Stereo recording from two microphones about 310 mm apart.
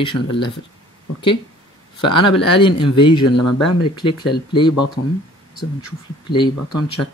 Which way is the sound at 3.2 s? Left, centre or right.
Left.